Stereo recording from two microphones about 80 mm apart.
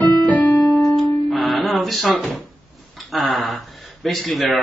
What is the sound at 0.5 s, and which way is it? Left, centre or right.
Piano, left.